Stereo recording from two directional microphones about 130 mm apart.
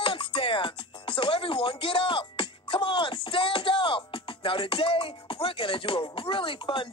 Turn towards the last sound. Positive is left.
turn(degrees=40)  # may be behind; listen again after turning